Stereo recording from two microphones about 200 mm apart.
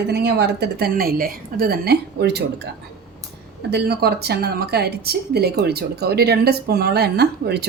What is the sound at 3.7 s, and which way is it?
A woman's voice, 55° right (ahead or behind).